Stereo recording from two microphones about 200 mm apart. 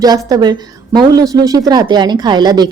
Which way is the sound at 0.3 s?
20° right (ahead or behind).